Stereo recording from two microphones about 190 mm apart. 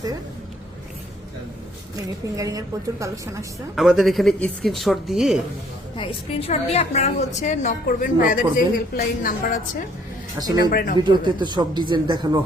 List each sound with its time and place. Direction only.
2.3 s a woman's voice: 20° right (ahead or behind)
3.8 s speech: centre (ahead or behind)
6.0 s a woman's voice: 30° left (ahead or behind); by 9.6 s 45° left (ahead or behind)
10.3 s speech: 20° right (ahead or behind)
10.7 s speech: 50° left (ahead or behind)
10.9 s speech: 25° right (ahead or behind)